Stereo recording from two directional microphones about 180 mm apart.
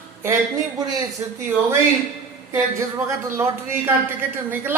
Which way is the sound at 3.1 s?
15° right (ahead or behind).